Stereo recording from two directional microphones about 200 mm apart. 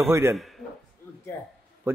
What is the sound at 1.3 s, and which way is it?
Speech, 10° left (ahead or behind).